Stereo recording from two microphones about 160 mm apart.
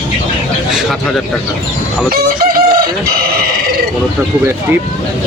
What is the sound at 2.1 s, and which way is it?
Chicken, 65° right (ahead or behind).